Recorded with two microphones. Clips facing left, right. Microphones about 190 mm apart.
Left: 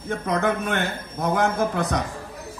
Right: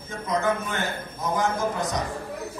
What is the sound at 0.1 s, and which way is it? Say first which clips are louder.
A man's voice: left 2 dB; 65° left (ahead or behind).